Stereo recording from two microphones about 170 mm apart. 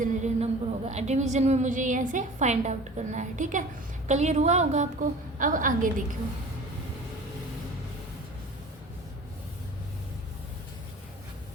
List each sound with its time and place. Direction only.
0.0 s a woman's voice: 45° right (ahead or behind)